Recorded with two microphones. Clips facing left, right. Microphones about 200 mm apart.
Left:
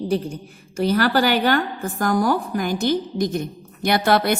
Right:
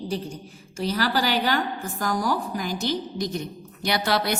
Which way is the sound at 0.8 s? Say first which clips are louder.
Left 6 dB; 60° left (ahead or behind).